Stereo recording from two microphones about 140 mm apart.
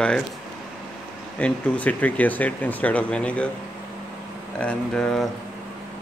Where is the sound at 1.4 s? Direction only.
10° left (ahead or behind).